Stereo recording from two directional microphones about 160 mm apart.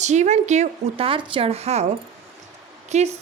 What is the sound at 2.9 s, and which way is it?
Speech, 45° right (ahead or behind).